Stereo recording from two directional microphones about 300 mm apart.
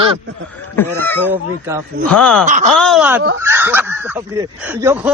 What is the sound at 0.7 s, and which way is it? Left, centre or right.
Speech, centre.